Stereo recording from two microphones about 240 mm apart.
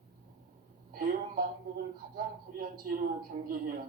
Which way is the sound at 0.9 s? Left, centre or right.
Right.